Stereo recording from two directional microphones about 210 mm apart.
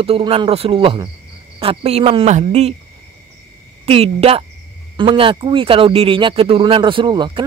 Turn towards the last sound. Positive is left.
turn(degrees=-20)  # may be behind; listen again after turning